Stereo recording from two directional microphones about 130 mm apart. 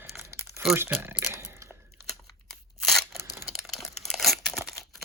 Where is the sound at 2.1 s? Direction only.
Centre (ahead or behind).